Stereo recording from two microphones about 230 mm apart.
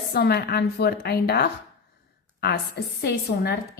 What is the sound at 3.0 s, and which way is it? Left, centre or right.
Speech, left.